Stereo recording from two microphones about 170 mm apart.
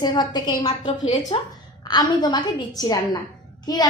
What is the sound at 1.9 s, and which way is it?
A woman's voice, 25° left (ahead or behind).